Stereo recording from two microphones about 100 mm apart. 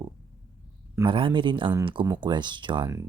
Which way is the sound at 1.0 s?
60° right (ahead or behind).